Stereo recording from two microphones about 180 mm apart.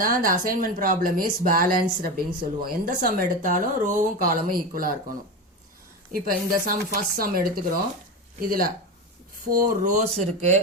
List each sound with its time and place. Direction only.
0.0 s a woman's voice: 50° right (ahead or behind)